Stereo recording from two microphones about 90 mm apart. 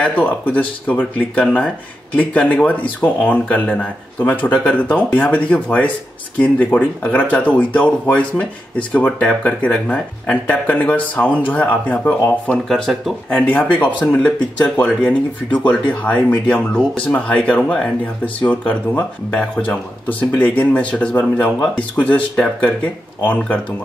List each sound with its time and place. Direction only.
0.0 s speech: 15° left (ahead or behind)
12.6 s speech: 5° left (ahead or behind)
13.5 s speech: 15° left (ahead or behind)